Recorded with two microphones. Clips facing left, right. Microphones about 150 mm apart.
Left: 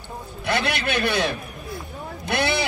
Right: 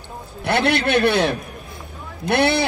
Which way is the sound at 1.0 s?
60° right (ahead or behind).